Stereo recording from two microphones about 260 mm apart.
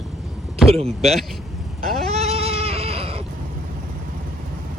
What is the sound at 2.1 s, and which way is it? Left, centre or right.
Goat, right.